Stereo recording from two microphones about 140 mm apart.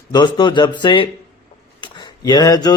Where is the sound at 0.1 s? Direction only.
30° left (ahead or behind).